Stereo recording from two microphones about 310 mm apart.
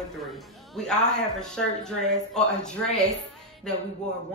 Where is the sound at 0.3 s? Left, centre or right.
Centre.